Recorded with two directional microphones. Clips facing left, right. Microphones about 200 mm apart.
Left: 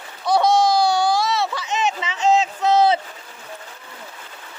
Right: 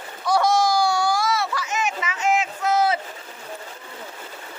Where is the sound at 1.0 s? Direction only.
20° left (ahead or behind).